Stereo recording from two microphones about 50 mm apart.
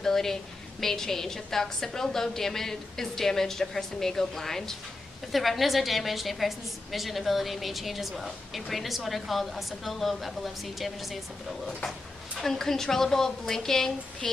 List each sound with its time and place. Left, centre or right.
0.0 s a woman's voice: centre
12.4 s a woman's voice: centre